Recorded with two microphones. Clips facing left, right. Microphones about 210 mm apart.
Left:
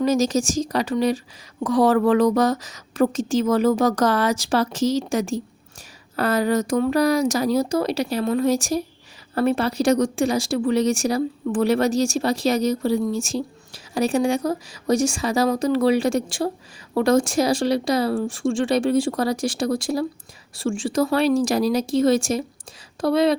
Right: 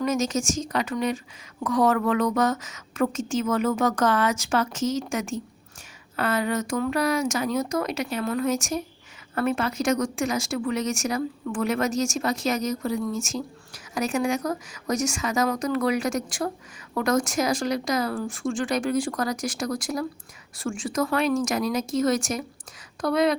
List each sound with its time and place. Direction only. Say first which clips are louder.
0.0 s speech: left 5 dB; 35° left (ahead or behind)